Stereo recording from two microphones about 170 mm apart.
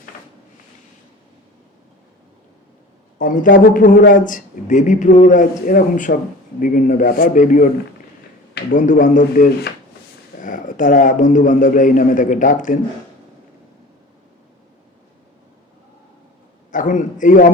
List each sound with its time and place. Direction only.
3.2 s a man's voice: 55° left (ahead or behind)
8.7 s a man's voice: 50° left (ahead or behind)
16.7 s a man's voice: 50° left (ahead or behind)